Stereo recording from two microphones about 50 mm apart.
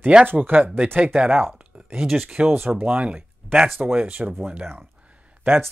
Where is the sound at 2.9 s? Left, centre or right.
Right.